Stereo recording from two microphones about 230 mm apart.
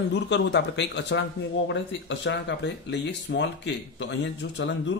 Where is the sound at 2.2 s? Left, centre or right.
Left.